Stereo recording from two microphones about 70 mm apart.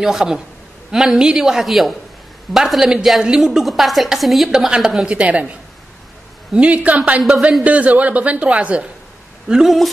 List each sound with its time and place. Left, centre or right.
0.0 s a woman's voice: centre
9.5 s a woman's voice: centre